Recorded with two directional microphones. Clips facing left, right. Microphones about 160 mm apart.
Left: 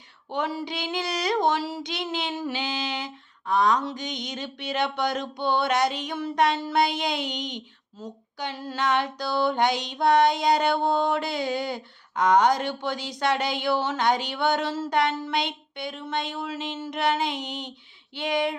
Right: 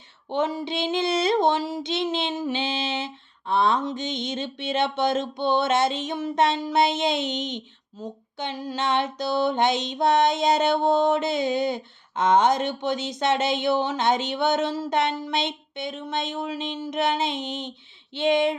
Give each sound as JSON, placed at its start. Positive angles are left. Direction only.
{"t": 0.3, "sound": "female singing", "side_deg": -20}